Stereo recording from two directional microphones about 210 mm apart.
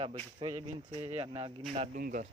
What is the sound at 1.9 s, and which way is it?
Speech, 40° right (ahead or behind).